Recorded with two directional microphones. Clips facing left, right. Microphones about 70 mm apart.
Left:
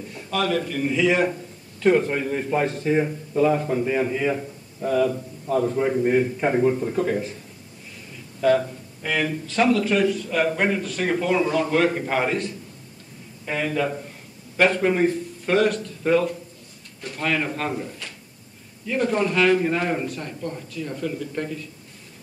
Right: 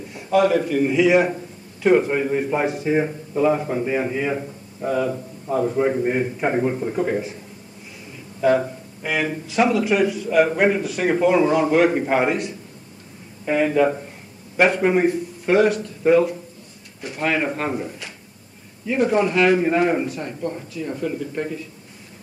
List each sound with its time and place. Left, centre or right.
0.3 s speech: centre
8.4 s speech: centre